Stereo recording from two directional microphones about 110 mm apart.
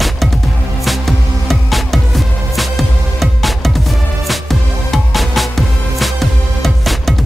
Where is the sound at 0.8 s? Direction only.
Centre (ahead or behind).